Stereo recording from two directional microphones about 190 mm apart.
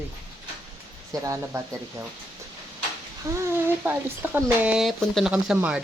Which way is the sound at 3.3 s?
15° right (ahead or behind).